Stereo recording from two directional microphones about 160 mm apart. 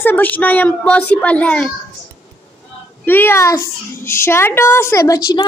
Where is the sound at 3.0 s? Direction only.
15° left (ahead or behind).